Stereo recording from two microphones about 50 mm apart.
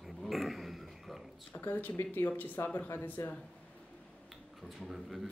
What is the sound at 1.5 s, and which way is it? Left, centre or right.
Speech, left.